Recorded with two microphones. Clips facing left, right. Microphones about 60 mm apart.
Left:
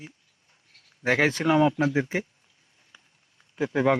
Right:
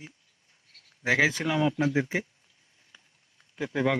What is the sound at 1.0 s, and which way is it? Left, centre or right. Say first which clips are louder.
Speech: left 1 dB; left.